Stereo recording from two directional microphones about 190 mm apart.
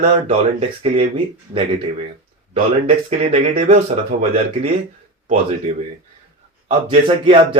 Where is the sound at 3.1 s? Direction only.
35° right (ahead or behind).